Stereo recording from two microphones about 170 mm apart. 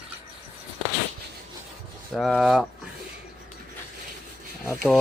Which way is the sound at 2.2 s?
Centre (ahead or behind).